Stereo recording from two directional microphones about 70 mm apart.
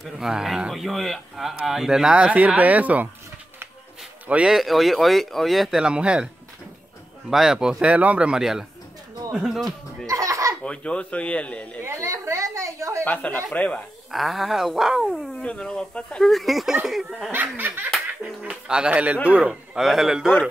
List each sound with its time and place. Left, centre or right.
0.0 s speech: centre
4.5 s a man's voice: centre
10.0 s baby laughter: right
10.6 s speech: centre
11.8 s a sound: right
13.0 s speech: left
14.1 s speech: centre
15.4 s speech: centre
16.3 s speech: centre
17.3 s speech: right
18.4 s a man's voice: centre